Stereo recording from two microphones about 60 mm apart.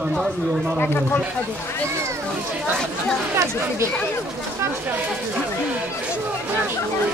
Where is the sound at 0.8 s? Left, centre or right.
Left.